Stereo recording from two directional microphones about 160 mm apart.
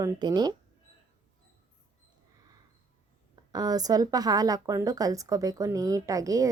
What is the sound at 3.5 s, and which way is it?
Speech, 25° right (ahead or behind).